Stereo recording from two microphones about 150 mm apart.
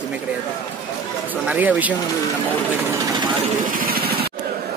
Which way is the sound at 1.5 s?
10° right (ahead or behind).